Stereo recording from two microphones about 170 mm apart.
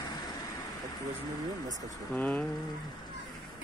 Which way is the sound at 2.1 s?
10° left (ahead or behind).